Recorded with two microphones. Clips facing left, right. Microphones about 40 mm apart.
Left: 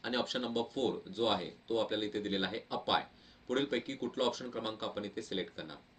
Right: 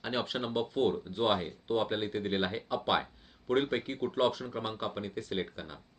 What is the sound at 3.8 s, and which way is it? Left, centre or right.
Speech, right.